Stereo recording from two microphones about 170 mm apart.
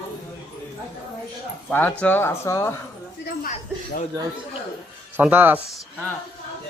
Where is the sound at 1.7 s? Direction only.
10° left (ahead or behind).